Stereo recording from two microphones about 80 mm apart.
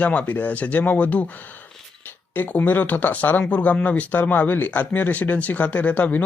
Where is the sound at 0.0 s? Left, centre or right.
Centre.